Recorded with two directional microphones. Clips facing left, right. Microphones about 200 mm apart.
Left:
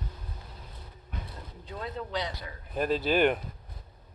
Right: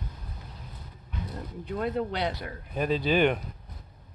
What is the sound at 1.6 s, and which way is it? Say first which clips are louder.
Speech: right 8 dB; 60° right (ahead or behind).